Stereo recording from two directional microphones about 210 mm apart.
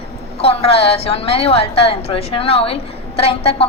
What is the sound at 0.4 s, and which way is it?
A woman's voice, 30° left (ahead or behind).